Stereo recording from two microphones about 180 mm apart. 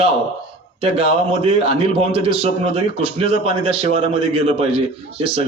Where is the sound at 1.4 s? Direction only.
30° right (ahead or behind).